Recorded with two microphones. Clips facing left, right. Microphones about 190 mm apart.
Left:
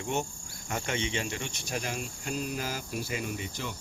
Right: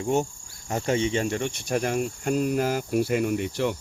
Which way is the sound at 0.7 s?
40° right (ahead or behind).